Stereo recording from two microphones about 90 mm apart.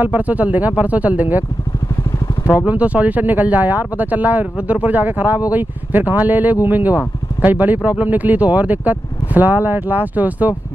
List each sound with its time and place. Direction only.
0.0 s speech: 20° right (ahead or behind)
2.6 s speech: 15° right (ahead or behind)